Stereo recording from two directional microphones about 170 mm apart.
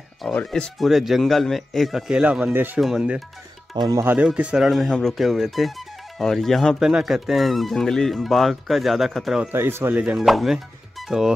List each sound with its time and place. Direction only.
0.2 s speech: 5° left (ahead or behind)
3.7 s speech: 25° right (ahead or behind)
4.0 s speech: 10° right (ahead or behind)
9.5 s speech: 15° right (ahead or behind)